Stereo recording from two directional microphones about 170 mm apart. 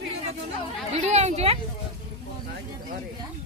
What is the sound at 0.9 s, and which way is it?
Speech, 40° right (ahead or behind).